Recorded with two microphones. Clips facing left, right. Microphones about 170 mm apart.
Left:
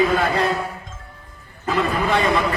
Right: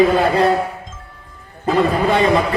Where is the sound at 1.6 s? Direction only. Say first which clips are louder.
Right 5 dB; 30° right (ahead or behind).